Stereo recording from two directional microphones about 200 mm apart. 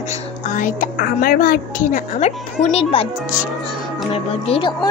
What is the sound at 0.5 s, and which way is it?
A woman's voice, 40° left (ahead or behind).